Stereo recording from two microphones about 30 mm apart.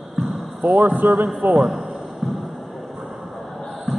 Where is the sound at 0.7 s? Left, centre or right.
Right.